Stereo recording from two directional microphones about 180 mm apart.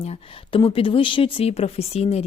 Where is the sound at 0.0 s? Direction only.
30° left (ahead or behind).